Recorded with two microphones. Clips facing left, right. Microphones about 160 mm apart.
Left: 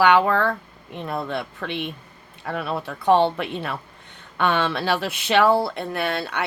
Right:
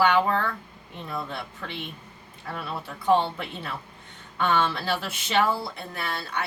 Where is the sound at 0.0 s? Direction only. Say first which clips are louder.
Left 5 dB; 65° left (ahead or behind).